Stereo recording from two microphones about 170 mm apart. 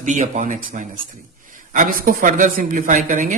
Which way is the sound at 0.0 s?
45° right (ahead or behind).